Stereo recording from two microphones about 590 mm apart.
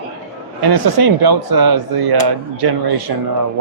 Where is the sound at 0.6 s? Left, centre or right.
Right.